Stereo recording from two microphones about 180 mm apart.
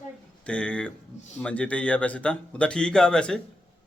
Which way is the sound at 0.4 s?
5° left (ahead or behind).